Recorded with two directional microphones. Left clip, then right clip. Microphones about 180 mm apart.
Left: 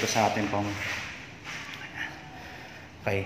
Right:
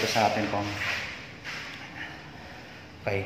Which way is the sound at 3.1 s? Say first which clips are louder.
Even; 35° left (ahead or behind).